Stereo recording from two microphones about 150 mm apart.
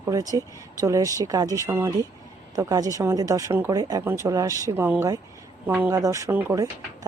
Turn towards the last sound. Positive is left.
turn(degrees=-20)  # may be behind; listen again after turning